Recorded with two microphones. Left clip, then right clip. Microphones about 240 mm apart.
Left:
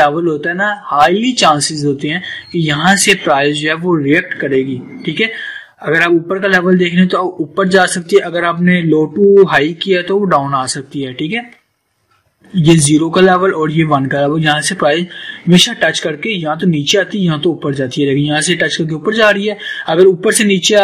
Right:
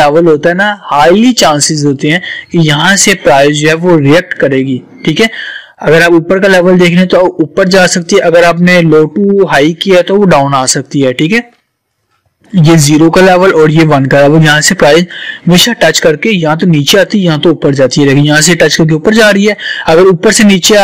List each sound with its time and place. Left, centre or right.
0.0 s a man's voice: right
12.6 s a man's voice: right